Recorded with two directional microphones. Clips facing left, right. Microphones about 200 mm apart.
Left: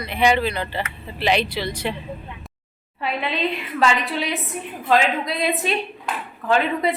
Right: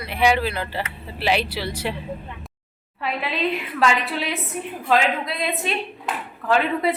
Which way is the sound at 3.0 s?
Centre (ahead or behind).